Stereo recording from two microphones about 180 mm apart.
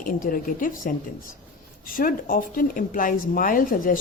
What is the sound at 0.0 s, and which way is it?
Speech, 50° left (ahead or behind).